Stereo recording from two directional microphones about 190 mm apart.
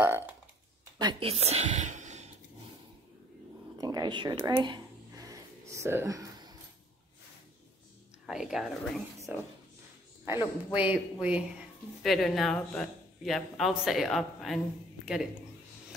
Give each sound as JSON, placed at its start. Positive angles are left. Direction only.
{"t": 0.0, "sound": "a woman's voice", "side_deg": -10}
{"t": 0.9, "sound": "a woman's voice", "side_deg": -20}
{"t": 1.3, "sound": "speech", "side_deg": -35}
{"t": 3.7, "sound": "a sound", "side_deg": -20}
{"t": 8.3, "sound": "a woman's voice", "side_deg": -5}